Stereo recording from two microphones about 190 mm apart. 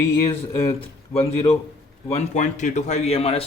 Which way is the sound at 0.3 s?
30° left (ahead or behind).